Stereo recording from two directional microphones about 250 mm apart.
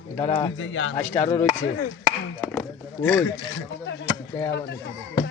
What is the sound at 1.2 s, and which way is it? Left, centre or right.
Speech, centre.